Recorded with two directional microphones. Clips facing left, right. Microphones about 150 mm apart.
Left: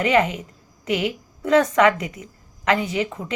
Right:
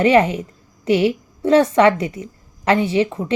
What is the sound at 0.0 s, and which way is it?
A woman's voice, 30° right (ahead or behind).